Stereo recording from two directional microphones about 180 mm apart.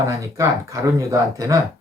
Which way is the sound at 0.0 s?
15° right (ahead or behind).